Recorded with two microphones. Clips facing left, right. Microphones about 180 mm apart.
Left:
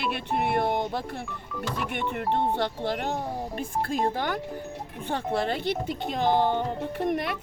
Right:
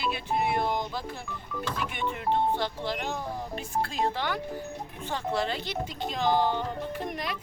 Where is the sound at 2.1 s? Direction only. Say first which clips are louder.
Even; 60° left (ahead or behind).